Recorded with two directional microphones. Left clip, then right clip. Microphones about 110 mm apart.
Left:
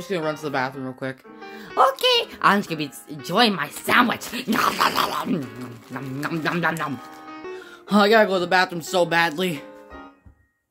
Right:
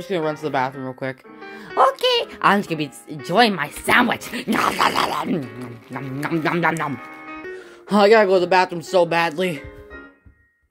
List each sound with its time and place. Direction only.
0.0 s speech: 20° right (ahead or behind); by 7.4 s 45° right (ahead or behind)
7.9 s speech: 15° right (ahead or behind)